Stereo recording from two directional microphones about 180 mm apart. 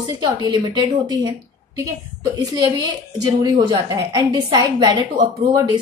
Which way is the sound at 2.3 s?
20° right (ahead or behind).